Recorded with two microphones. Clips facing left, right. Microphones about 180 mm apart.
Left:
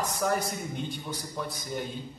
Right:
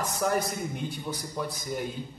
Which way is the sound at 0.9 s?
Centre (ahead or behind).